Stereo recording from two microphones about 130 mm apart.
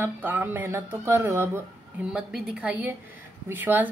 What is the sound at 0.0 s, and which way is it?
Speech, 15° right (ahead or behind).